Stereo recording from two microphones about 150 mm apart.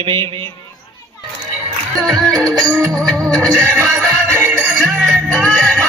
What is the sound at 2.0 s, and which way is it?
Music, centre (ahead or behind).